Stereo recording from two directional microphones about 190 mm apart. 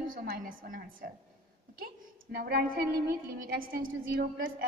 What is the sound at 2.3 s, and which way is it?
A woman's voice, 55° right (ahead or behind).